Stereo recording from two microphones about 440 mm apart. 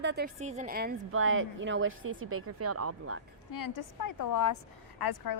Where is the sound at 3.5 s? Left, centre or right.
Left.